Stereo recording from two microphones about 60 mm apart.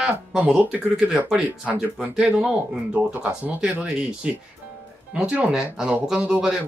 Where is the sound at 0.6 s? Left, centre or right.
Centre.